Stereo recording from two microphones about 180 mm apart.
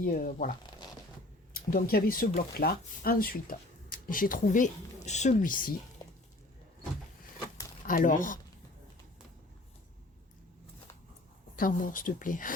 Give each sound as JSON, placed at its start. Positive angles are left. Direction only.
{"t": 0.0, "sound": "speech", "side_deg": 50}
{"t": 1.5, "sound": "speech", "side_deg": 55}
{"t": 7.9, "sound": "speech", "side_deg": 45}
{"t": 11.5, "sound": "speech", "side_deg": 50}